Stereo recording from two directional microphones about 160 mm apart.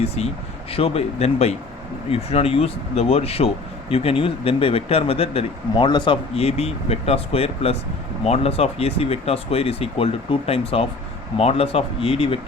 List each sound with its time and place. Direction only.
0.2 s speech: 40° left (ahead or behind)